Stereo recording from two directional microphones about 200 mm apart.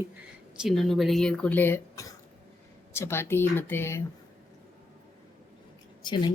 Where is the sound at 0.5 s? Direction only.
Centre (ahead or behind).